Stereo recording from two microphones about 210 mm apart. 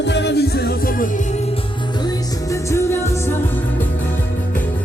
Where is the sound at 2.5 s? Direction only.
15° left (ahead or behind).